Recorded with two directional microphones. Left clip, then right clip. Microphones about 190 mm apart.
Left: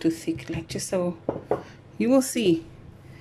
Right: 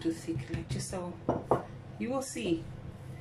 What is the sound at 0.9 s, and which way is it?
Speech, 60° left (ahead or behind).